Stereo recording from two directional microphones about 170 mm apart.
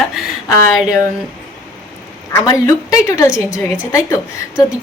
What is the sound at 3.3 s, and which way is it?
Speech, 5° right (ahead or behind).